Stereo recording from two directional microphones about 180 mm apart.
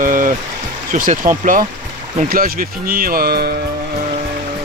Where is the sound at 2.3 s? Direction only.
55° right (ahead or behind).